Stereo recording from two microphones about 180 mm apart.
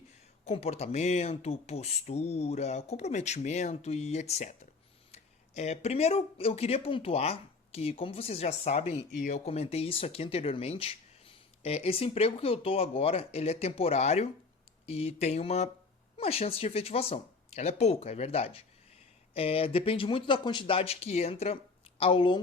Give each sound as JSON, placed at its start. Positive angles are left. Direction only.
{"t": 0.4, "sound": "speech", "side_deg": 35}